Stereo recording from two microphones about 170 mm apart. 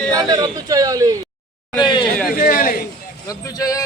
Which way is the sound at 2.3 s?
55° left (ahead or behind).